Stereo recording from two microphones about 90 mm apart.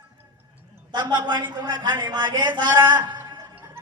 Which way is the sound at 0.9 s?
55° right (ahead or behind).